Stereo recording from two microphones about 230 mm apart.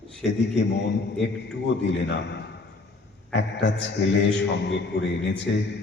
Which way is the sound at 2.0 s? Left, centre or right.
Left.